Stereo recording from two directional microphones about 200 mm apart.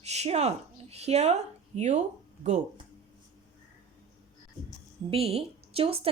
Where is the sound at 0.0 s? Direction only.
35° right (ahead or behind).